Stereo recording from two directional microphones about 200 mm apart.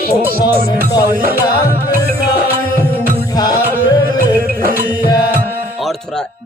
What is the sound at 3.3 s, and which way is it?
Music, 20° left (ahead or behind).